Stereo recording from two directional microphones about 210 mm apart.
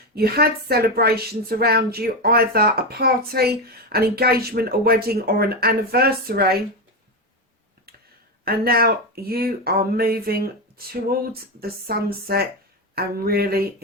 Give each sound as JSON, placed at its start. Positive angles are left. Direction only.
{"t": 0.1, "sound": "a woman's voice", "side_deg": -45}
{"t": 8.4, "sound": "a woman's voice", "side_deg": -45}